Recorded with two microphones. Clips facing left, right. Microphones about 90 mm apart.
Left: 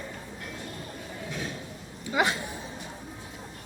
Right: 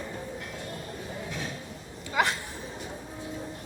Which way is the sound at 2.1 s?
10° left (ahead or behind).